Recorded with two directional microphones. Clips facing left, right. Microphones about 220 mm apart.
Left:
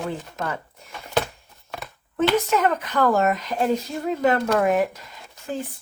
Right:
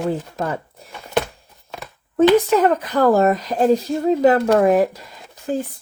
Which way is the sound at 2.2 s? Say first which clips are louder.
Right 7 dB; 35° right (ahead or behind).